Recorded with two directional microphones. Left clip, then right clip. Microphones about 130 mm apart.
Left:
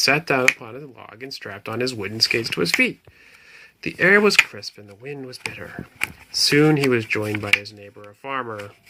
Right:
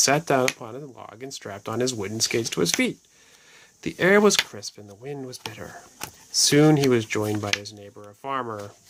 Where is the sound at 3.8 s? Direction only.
35° right (ahead or behind).